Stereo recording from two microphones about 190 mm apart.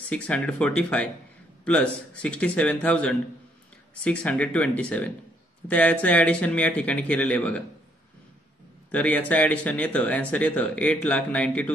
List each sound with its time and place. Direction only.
0.1 s speech: 5° left (ahead or behind)
8.9 s speech: 10° left (ahead or behind)